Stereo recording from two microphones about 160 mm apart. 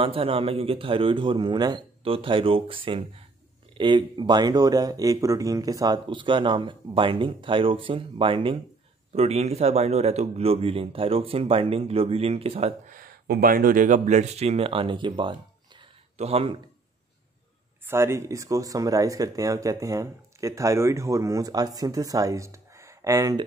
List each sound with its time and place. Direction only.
0.0 s speech: 35° right (ahead or behind)
12.9 s speech: 65° right (ahead or behind); by 16.5 s 40° right (ahead or behind)
17.8 s speech: 15° right (ahead or behind)